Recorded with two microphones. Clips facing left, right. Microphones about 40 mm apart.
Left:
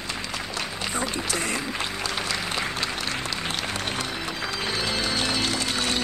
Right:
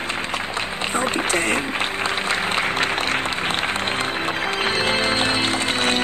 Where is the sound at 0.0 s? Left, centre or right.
Right.